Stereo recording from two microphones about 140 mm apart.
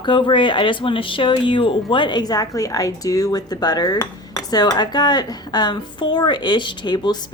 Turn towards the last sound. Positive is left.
turn(degrees=30)  # may be behind; listen again after turning